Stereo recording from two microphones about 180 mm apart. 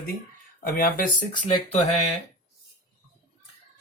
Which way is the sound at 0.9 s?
50° left (ahead or behind).